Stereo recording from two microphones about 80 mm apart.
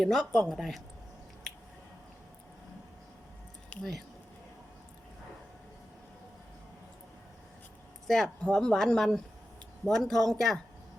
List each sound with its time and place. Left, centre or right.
0.0 s speech: centre
3.7 s a sound: centre
8.0 s speech: centre